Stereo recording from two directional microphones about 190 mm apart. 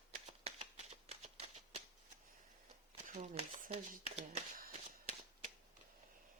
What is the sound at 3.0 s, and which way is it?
Speech, 35° right (ahead or behind).